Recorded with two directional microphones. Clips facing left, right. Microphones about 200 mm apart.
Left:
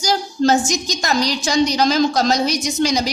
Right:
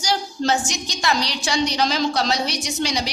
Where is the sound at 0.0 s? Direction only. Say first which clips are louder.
Left 5 dB; 45° left (ahead or behind).